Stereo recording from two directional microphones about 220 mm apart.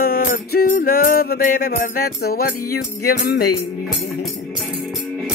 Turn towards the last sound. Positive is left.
turn(degrees=45)  # may be behind; listen again after turning